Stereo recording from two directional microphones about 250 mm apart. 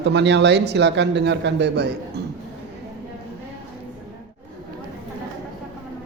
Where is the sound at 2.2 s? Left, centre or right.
Right.